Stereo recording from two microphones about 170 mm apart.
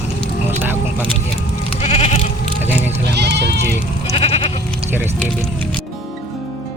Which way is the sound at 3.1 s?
80° right.